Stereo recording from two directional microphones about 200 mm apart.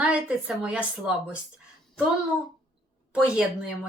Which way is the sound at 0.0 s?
5° right (ahead or behind).